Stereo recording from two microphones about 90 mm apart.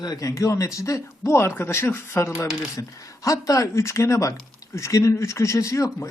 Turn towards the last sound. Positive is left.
turn(degrees=35)  # may be behind; listen again after turning